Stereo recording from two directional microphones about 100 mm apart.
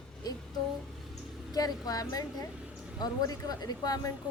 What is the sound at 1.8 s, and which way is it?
Speech, 40° left (ahead or behind).